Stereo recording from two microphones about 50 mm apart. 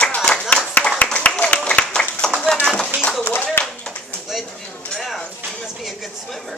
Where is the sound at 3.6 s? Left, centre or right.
Left.